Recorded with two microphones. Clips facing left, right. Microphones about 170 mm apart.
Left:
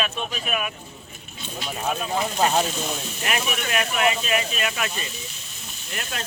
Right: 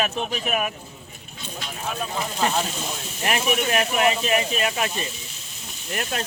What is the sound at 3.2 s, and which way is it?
Speech, 35° right (ahead or behind).